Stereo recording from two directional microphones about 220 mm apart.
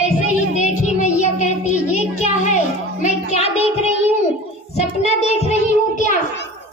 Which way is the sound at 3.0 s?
30° left (ahead or behind).